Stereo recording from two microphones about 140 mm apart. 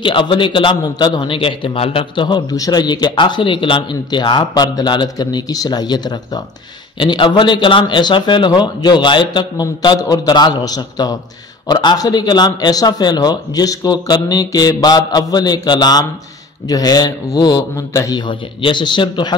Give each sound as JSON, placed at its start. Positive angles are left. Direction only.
{"t": 0.0, "sound": "a man's voice", "side_deg": 35}